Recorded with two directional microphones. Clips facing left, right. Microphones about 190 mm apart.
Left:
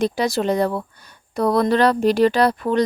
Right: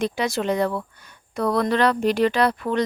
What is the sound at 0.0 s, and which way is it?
Speech, 35° left (ahead or behind).